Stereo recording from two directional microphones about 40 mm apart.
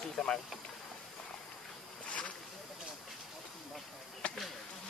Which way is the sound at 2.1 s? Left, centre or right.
Left.